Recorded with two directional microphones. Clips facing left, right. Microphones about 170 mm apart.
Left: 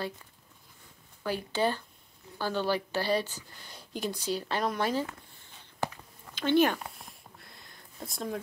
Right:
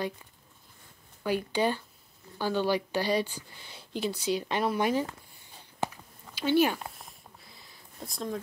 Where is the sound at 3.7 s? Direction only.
45° left (ahead or behind).